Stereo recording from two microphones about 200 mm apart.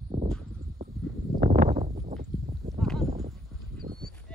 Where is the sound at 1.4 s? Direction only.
35° right (ahead or behind).